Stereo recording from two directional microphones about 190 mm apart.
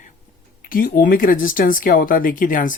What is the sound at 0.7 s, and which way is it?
Speech, 50° left (ahead or behind).